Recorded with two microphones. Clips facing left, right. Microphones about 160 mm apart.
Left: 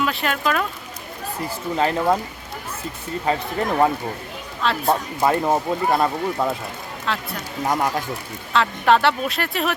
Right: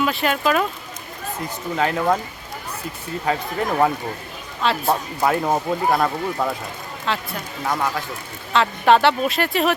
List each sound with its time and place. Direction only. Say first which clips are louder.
0.0 s speech: right 2 dB; centre (ahead or behind)
1.7 s speech: even; 5° left (ahead or behind)
3.2 s speech: even; centre (ahead or behind)
7.6 s speech: left 2 dB; 20° left (ahead or behind)
8.5 s speech: right 2 dB; centre (ahead or behind)